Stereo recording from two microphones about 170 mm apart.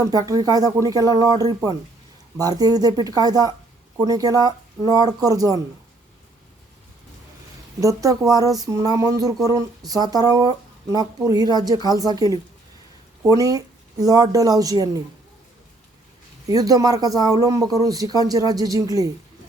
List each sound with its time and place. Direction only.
0.0 s speech: 20° right (ahead or behind)
7.8 s speech: 20° right (ahead or behind)
16.5 s speech: 20° right (ahead or behind)